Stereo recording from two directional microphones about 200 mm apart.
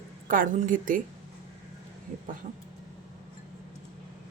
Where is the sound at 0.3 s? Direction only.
40° right (ahead or behind).